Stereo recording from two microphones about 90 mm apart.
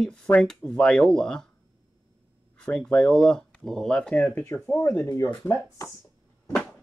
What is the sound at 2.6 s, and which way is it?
Speech, 10° left (ahead or behind).